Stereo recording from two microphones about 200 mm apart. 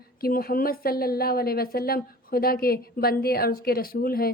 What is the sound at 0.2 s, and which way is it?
A woman's voice, 50° left (ahead or behind).